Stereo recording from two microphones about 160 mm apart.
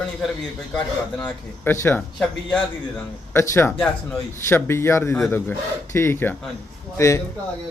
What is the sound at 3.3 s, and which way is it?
A man's voice, 15° left (ahead or behind).